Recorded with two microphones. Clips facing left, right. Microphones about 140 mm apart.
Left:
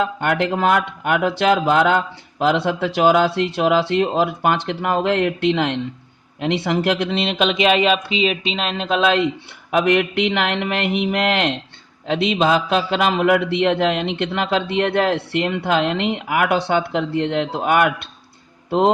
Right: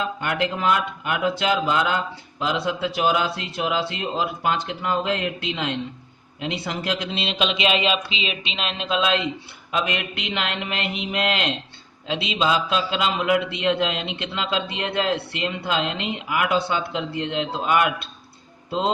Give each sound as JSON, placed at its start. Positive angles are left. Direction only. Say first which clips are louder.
{"t": 0.0, "sound": "a man's voice", "louder": "left 5 dB", "side_deg": 65}